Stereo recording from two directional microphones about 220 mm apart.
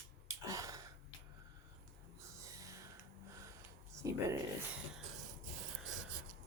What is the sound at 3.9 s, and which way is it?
Speech, 15° right (ahead or behind).